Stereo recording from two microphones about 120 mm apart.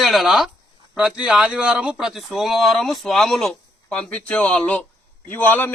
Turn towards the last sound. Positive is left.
turn(degrees=15)  # may be behind; listen again after turning